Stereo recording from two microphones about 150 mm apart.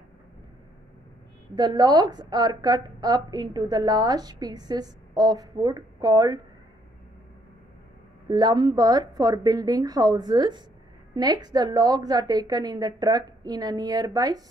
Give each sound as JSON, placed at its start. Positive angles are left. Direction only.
{"t": 1.5, "sound": "a woman's voice", "side_deg": -30}
{"t": 8.3, "sound": "a woman's voice", "side_deg": -25}